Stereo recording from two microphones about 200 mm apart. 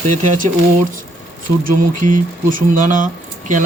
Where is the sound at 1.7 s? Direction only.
40° right (ahead or behind).